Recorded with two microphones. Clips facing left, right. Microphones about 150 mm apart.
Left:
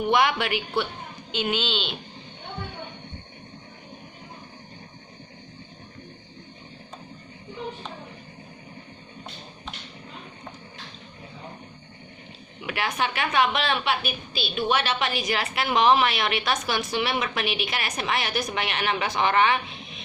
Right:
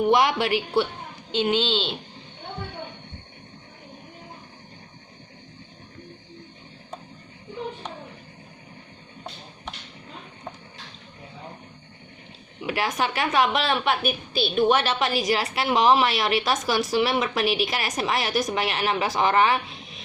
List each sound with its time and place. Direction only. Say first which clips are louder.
0.0 s a woman's voice: right 2 dB; 35° right (ahead or behind)
12.6 s a woman's voice: right 2 dB; 35° right (ahead or behind)